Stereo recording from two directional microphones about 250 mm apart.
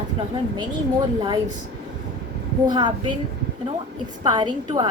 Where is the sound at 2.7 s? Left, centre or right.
Centre.